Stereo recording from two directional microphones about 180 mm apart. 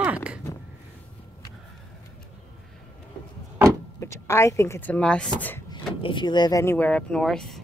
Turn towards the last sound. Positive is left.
turn(degrees=0)  # may be behind; listen again after turning